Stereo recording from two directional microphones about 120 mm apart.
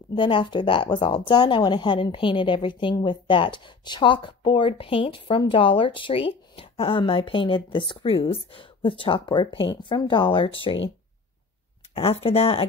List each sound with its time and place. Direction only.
0.1 s speech: 40° left (ahead or behind)
11.9 s speech: 55° left (ahead or behind)